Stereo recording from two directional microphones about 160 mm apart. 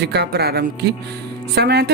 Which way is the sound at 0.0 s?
90° right.